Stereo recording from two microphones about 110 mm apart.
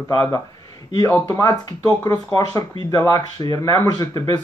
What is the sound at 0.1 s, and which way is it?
Speech, 35° left (ahead or behind).